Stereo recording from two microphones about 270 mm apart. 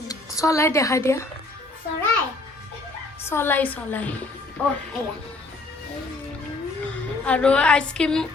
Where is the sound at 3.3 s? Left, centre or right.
Centre.